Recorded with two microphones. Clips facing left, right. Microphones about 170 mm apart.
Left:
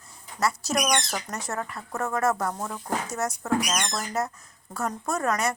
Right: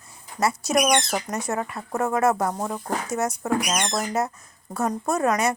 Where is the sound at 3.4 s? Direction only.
15° right (ahead or behind).